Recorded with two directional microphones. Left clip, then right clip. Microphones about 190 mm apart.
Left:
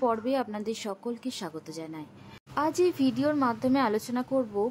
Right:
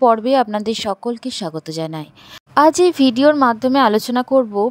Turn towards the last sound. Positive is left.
turn(degrees=-45)  # may be behind; listen again after turning